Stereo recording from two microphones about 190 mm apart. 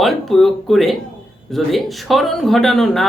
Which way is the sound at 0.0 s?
Centre (ahead or behind).